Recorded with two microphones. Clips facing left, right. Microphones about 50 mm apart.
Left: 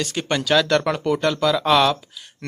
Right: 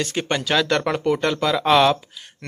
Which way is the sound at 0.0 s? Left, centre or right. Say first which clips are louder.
Even; right.